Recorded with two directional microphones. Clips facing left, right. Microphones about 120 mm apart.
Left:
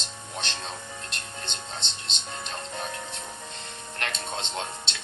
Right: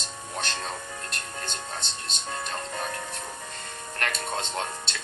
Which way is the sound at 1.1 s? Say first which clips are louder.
Right 2 dB; 25° left (ahead or behind).